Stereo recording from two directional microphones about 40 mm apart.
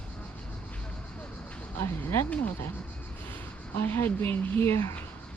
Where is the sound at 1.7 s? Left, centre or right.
Left.